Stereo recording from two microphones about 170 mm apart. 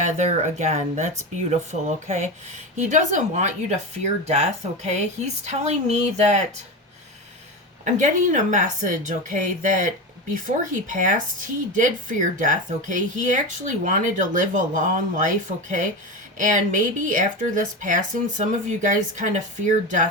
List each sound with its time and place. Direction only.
0.0 s a woman's voice: 45° right (ahead or behind)
7.9 s speech: 50° right (ahead or behind)